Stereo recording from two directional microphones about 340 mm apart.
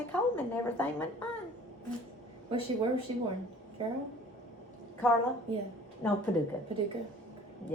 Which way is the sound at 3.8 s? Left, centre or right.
Centre.